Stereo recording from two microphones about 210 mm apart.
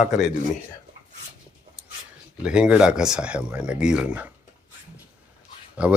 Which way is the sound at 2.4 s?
5° right (ahead or behind).